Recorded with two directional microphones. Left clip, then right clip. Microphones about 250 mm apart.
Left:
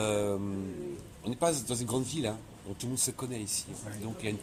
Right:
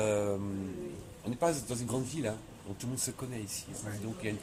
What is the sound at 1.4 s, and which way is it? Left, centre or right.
Speech, left.